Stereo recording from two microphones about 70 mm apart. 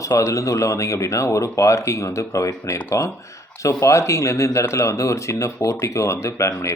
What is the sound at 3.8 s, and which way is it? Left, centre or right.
Speech, left.